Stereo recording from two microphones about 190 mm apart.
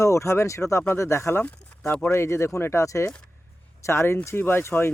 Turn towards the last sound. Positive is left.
turn(degrees=10)  # may be behind; listen again after turning